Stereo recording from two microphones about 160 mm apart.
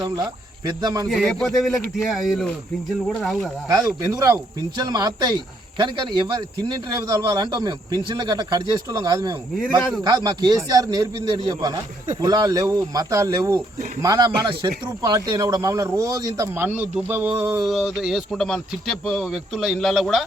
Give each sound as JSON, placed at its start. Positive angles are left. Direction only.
{"t": 0.8, "sound": "speech", "side_deg": -25}
{"t": 1.0, "sound": "speech", "side_deg": 0}
{"t": 3.7, "sound": "speech", "side_deg": -20}
{"t": 16.6, "sound": "speech", "side_deg": -10}